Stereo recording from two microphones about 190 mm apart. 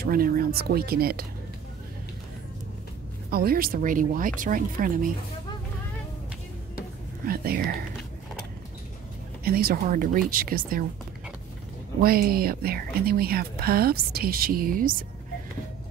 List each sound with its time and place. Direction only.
0.0 s a woman's voice: 50° right (ahead or behind)
3.3 s a woman's voice: 50° right (ahead or behind)
7.2 s a woman's voice: 50° right (ahead or behind)
9.4 s a woman's voice: 50° right (ahead or behind)
12.0 s a woman's voice: 50° right (ahead or behind)